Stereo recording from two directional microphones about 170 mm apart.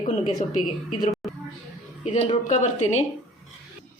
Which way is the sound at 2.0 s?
40° left (ahead or behind).